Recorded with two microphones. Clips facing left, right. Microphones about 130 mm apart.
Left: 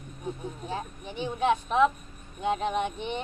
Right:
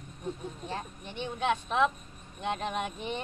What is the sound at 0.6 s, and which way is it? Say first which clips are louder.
Speech: left 4 dB; centre (ahead or behind).